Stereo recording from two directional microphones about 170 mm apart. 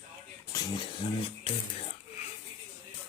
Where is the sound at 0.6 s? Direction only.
25° left (ahead or behind).